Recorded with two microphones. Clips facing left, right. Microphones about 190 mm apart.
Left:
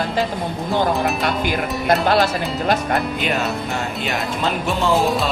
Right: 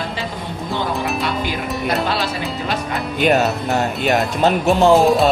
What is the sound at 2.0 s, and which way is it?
Speech, 50° left (ahead or behind).